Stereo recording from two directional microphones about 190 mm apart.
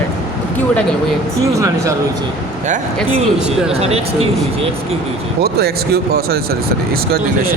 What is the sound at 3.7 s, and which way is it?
Speech, 35° right (ahead or behind).